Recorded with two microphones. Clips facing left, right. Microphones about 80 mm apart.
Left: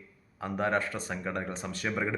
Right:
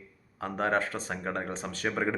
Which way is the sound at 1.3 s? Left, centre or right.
Right.